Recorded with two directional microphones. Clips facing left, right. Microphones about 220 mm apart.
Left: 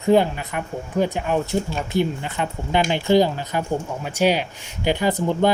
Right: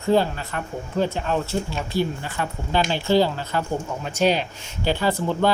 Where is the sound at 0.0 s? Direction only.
15° left (ahead or behind).